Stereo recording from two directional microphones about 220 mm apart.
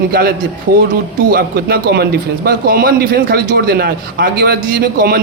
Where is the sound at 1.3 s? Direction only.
45° right (ahead or behind).